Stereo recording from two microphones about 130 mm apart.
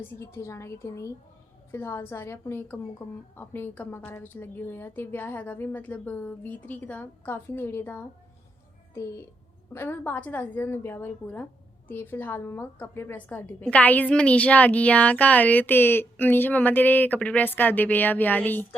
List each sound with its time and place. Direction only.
0.2 s a woman's voice: 20° left (ahead or behind)
9.7 s a woman's voice: 15° left (ahead or behind)